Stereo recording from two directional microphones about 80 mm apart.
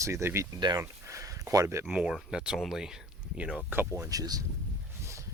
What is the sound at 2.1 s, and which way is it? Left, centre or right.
Speech, centre.